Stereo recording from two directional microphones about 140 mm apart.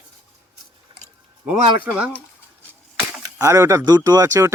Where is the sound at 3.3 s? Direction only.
25° right (ahead or behind).